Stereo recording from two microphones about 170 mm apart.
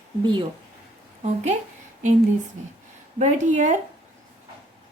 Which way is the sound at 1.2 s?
45° right (ahead or behind).